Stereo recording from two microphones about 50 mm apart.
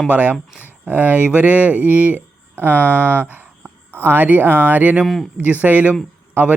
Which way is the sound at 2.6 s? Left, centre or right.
Left.